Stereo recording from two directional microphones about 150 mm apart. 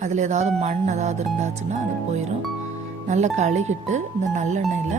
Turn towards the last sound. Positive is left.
turn(degrees=-55)  # may be behind; listen again after turning